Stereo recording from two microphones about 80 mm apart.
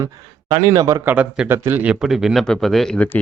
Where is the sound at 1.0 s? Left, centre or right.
Right.